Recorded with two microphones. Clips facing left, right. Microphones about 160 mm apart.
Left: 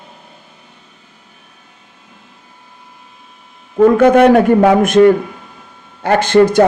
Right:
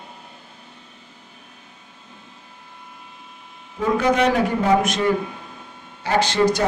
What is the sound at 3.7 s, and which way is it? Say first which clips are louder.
A man's voice: left 11 dB; 60° left (ahead or behind).